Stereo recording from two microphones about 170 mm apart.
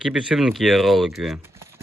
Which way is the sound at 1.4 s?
15° right (ahead or behind).